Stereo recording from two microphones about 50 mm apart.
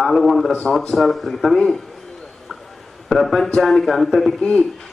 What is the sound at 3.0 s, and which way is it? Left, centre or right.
A man's voice, centre.